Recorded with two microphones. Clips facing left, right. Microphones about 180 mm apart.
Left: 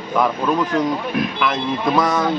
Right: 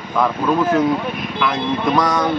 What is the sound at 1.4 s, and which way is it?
Speech, centre (ahead or behind).